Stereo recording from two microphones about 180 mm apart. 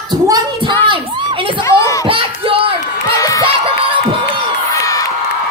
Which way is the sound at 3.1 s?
20° left (ahead or behind).